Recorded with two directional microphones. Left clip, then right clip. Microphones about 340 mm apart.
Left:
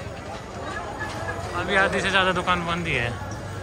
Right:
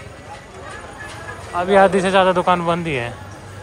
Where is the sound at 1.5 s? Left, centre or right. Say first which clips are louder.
Right 9 dB; centre.